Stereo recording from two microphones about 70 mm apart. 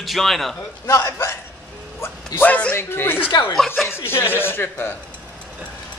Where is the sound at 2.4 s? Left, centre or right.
Left.